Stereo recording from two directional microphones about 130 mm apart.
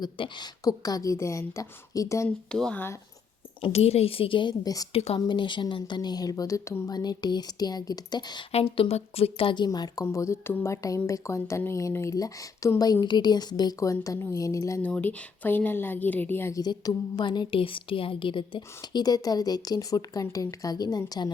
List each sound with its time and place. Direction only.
0.0 s speech: 35° left (ahead or behind)
2.5 s a woman's voice: 5° left (ahead or behind)
3.6 s a woman's voice: 50° left (ahead or behind); by 4.9 s 30° left (ahead or behind)
4.9 s a woman's voice: 50° left (ahead or behind)
5.2 s a woman's voice: 35° left (ahead or behind)
8.5 s a woman's voice: 45° left (ahead or behind)
9.6 s speech: 30° left (ahead or behind)
14.8 s a woman's voice: 15° left (ahead or behind)
16.6 s a woman's voice: 30° left (ahead or behind)